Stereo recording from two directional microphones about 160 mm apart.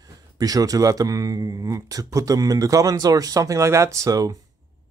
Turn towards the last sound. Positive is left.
turn(degrees=-20)  # may be behind; listen again after turning